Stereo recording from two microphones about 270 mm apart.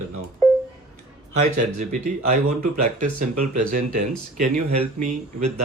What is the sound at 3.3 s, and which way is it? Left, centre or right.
Speech, right.